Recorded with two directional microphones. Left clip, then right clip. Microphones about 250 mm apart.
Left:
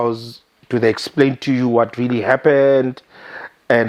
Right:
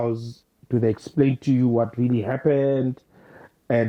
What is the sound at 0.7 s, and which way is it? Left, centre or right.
Speech, centre.